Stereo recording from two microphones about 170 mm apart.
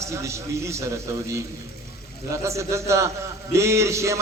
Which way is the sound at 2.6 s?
15° right (ahead or behind).